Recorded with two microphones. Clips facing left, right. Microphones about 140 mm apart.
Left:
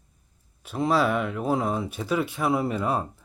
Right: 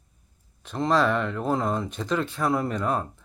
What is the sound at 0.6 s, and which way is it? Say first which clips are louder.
Speech: even; 10° left (ahead or behind).